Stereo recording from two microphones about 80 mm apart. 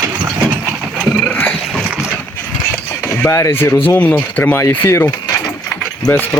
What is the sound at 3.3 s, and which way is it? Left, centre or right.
Speech, left.